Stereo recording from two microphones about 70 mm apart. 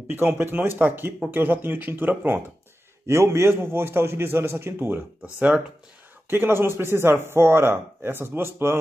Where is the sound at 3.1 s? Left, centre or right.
Right.